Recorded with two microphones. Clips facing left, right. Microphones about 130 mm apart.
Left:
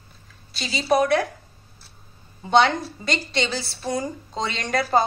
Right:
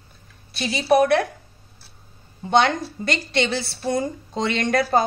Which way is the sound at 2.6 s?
55° right (ahead or behind).